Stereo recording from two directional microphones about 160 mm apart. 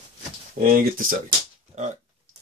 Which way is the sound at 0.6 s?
60° right (ahead or behind).